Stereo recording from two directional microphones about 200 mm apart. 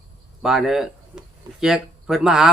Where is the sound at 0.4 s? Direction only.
Centre (ahead or behind).